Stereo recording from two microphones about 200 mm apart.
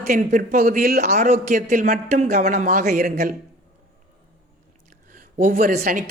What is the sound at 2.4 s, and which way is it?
Speech, 50° right (ahead or behind).